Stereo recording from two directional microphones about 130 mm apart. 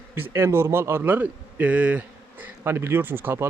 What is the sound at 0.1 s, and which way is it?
A man's voice, 20° right (ahead or behind).